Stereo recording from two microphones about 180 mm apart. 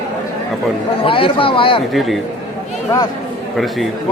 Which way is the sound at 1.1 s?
30° left (ahead or behind).